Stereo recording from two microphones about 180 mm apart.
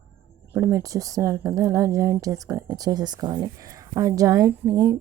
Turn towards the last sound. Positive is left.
turn(degrees=-20)  # may be behind; listen again after turning